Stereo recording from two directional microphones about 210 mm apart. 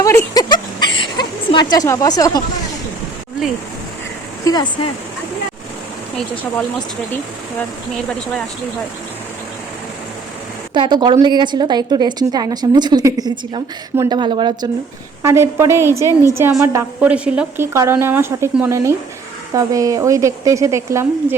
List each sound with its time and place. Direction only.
0.0 s a sound: 15° left (ahead or behind)
1.7 s a woman's voice: 15° left (ahead or behind)
4.4 s speech: 20° left (ahead or behind)
10.8 s a woman's voice: 20° right (ahead or behind)